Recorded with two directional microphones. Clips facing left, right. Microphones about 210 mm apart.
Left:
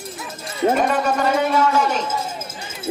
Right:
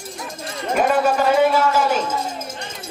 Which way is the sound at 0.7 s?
5° right (ahead or behind).